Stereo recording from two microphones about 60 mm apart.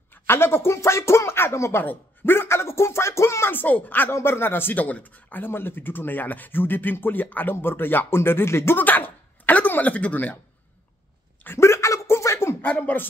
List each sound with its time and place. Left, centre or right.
0.1 s speech: left
1.8 s speech: left
3.4 s speech: left
4.1 s speech: left
11.4 s a sound: left
12.9 s a man's voice: left